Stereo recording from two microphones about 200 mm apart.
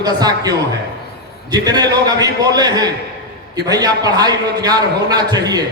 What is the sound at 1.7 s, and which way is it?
A man's voice, 20° right (ahead or behind).